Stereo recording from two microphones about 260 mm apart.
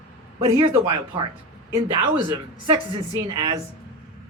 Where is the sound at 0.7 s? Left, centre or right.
Centre.